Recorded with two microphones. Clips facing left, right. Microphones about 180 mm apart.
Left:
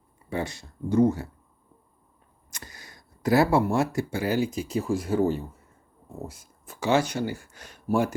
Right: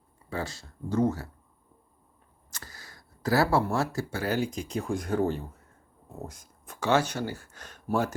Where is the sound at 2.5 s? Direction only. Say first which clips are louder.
Left 2 dB; 15° left (ahead or behind).